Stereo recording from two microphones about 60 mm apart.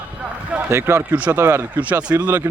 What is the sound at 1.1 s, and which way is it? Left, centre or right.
Speech, right.